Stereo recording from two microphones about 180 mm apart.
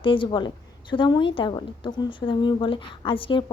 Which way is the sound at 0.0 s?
25° left (ahead or behind).